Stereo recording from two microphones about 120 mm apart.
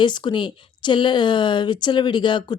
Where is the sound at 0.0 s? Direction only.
40° left (ahead or behind).